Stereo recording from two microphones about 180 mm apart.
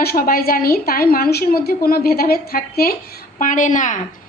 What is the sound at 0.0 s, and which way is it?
A woman's voice, 55° left (ahead or behind).